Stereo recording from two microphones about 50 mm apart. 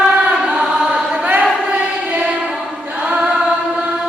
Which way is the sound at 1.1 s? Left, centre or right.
Right.